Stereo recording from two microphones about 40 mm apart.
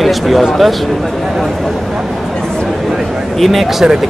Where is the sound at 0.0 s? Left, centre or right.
Centre.